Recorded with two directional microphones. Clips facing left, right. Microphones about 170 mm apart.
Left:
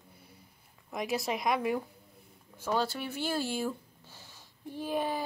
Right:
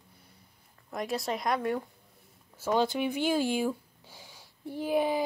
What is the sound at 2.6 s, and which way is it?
Speech, 20° right (ahead or behind).